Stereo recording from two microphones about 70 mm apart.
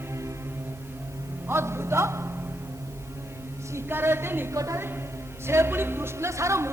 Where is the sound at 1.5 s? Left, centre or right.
Right.